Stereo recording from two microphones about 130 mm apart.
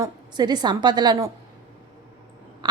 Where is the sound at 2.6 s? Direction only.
30° right (ahead or behind).